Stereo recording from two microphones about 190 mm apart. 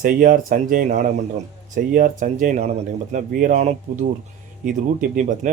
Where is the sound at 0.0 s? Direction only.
45° right (ahead or behind).